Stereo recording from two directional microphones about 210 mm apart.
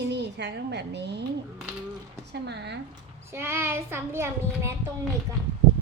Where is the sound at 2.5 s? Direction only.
55° right (ahead or behind).